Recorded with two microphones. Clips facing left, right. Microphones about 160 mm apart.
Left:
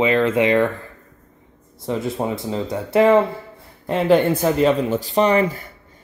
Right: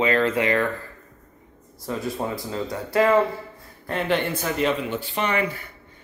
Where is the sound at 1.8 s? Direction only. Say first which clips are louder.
Left 5 dB; 25° left (ahead or behind); by 5.6 s 40° left (ahead or behind).